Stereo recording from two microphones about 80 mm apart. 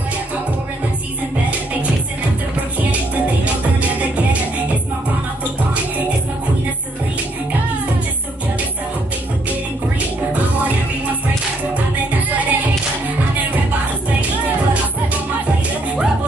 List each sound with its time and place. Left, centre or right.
11.7 s music: centre